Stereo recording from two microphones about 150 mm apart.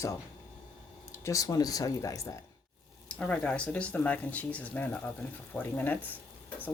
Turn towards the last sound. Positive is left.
turn(degrees=10)  # may be behind; listen again after turning